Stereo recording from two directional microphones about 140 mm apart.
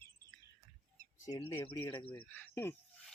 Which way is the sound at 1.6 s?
35° left (ahead or behind).